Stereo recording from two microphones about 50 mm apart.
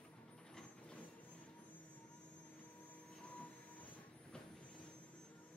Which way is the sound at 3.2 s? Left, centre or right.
Left.